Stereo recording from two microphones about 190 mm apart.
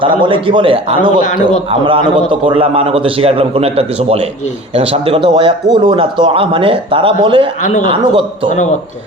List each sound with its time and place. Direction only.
0.0 s a man's voice: 25° right (ahead or behind)
7.6 s a man's voice: 40° left (ahead or behind)
7.9 s a man's voice: 25° right (ahead or behind)